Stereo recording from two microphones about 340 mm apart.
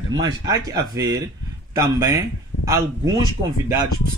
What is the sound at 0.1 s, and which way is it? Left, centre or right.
Speech, centre.